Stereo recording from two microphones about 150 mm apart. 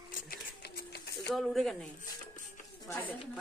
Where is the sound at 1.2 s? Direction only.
Centre (ahead or behind).